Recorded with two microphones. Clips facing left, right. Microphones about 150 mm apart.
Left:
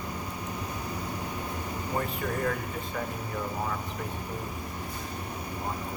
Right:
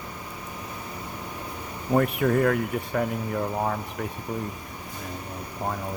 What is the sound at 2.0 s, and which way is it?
Speech, 70° right (ahead or behind).